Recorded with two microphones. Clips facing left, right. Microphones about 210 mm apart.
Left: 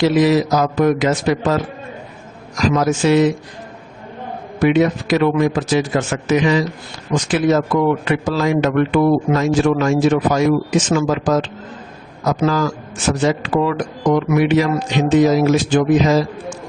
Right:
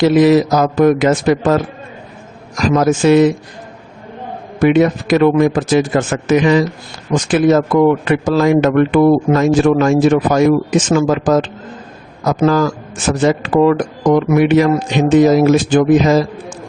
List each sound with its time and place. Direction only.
0.0 s a man's voice: 55° right (ahead or behind)
2.6 s a man's voice: 50° right (ahead or behind)
4.6 s a man's voice: 50° right (ahead or behind)